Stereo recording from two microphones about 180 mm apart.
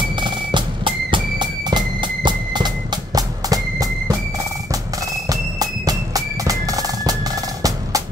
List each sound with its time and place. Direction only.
0.1 s music: 25° right (ahead or behind)
5.3 s music: 20° right (ahead or behind)